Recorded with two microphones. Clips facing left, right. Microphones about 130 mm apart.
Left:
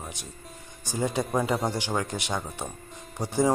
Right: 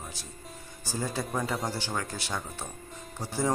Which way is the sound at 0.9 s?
20° left (ahead or behind).